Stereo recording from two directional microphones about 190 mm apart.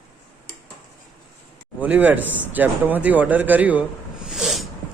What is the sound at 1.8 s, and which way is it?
Speech, 10° right (ahead or behind).